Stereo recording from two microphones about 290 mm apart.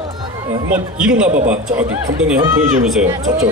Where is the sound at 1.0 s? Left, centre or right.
Centre.